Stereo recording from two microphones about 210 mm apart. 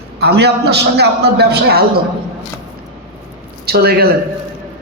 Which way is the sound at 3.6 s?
50° right (ahead or behind).